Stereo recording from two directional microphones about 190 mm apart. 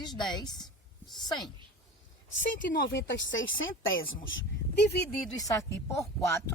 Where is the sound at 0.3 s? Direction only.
20° left (ahead or behind).